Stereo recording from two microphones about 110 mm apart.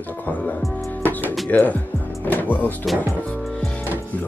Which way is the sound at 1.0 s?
15° left (ahead or behind).